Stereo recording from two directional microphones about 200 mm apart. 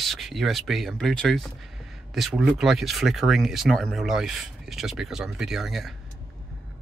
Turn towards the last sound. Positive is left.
turn(degrees=0)  # may be behind; listen again after turning